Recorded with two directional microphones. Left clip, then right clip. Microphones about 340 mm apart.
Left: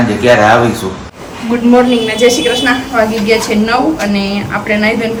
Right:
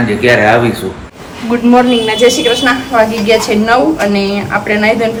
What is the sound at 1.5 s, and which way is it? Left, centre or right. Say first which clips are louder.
A woman's voice: even; centre.